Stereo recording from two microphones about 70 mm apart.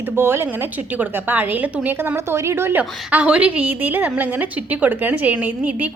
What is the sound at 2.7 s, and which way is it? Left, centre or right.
A woman's voice, centre.